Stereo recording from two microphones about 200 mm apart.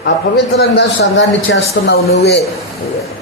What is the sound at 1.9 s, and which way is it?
Speech, 55° left (ahead or behind).